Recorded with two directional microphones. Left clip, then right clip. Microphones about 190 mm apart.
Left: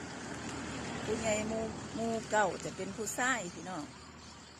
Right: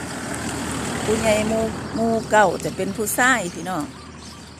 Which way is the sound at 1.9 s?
Centre (ahead or behind).